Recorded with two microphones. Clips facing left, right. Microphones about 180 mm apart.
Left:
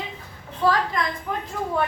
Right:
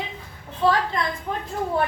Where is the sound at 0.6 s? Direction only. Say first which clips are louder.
Right 1 dB; 25° right (ahead or behind).